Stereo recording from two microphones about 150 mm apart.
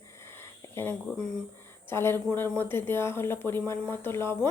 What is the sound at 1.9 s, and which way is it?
Speech, 15° left (ahead or behind).